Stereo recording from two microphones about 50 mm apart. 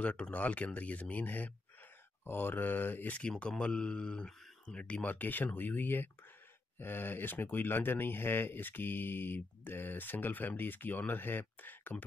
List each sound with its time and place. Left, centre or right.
0.0 s speech: left
3.2 s speech: left
5.0 s speech: left